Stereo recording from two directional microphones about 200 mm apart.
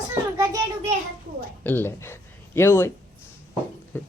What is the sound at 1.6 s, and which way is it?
Speech, 10° left (ahead or behind).